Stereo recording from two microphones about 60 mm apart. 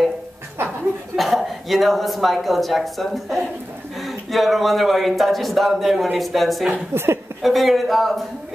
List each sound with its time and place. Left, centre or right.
1.1 s speech: centre
6.9 s a woman's voice: right
7.4 s speech: centre